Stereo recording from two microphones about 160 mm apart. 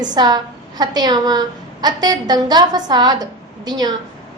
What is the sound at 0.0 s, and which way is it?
A woman's voice, 25° right (ahead or behind).